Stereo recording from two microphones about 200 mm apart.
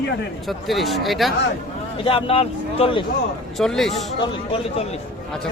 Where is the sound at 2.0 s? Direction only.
30° left (ahead or behind).